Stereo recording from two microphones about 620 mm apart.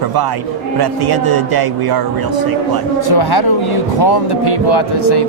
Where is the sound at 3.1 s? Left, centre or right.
Left.